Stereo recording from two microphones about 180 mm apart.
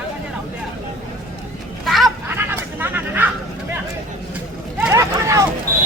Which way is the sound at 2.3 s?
10° right (ahead or behind).